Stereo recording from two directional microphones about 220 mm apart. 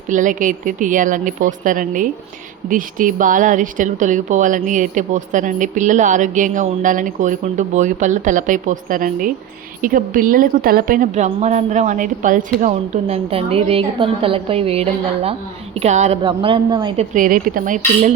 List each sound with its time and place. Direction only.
0.1 s a woman's voice: 35° right (ahead or behind)
17.2 s a woman's voice: 40° right (ahead or behind)